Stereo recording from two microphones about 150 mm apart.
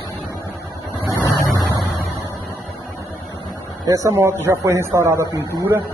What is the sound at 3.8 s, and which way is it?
A man's voice, 20° right (ahead or behind).